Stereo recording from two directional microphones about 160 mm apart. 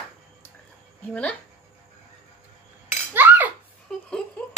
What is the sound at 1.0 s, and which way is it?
Speech, 10° left (ahead or behind).